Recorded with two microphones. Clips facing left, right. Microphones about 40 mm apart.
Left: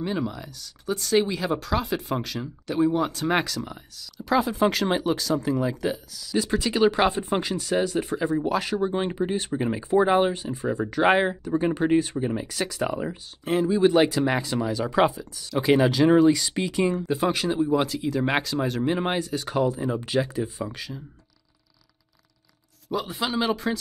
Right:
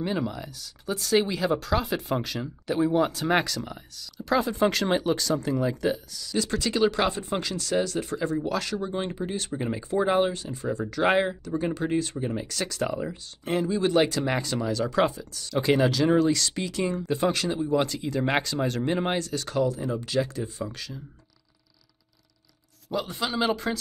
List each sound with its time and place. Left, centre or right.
0.0 s speech: centre
6.3 s speech: centre
12.3 s speech: centre
15.9 s speech: centre
23.0 s speech: centre